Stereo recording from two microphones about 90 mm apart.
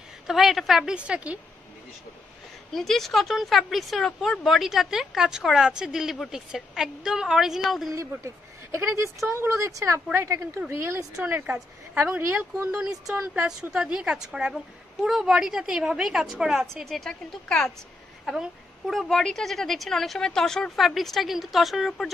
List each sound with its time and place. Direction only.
0.3 s a woman's voice: centre (ahead or behind)
2.7 s speech: 5° left (ahead or behind)
8.7 s speech: 30° right (ahead or behind)
13.0 s a woman's voice: 5° right (ahead or behind)